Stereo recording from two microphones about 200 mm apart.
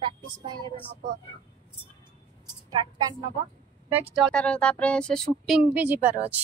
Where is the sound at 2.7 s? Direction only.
20° right (ahead or behind).